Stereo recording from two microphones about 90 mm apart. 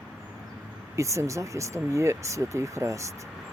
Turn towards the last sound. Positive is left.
turn(degrees=-35)  # may be behind; listen again after turning